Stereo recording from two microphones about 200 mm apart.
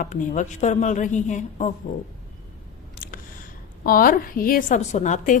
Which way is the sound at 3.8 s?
45° left (ahead or behind).